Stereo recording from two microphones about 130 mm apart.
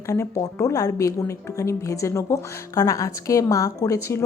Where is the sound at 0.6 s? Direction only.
25° left (ahead or behind).